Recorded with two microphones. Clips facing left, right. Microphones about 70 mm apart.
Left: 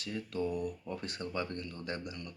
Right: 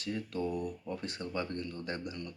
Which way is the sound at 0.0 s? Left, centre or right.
Right.